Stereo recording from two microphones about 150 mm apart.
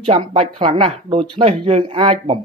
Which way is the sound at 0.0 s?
40° right (ahead or behind).